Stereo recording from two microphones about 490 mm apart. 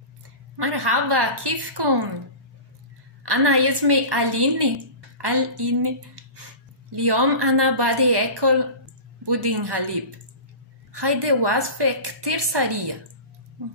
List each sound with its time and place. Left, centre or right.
0.6 s a woman's voice: right
3.3 s a woman's voice: right
10.9 s a woman's voice: right